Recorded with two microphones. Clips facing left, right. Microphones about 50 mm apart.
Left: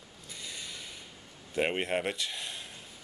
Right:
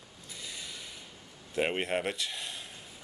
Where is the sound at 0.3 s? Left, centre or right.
Centre.